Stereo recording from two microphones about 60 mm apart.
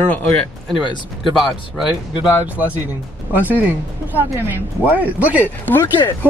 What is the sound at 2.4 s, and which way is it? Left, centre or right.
Speech, right.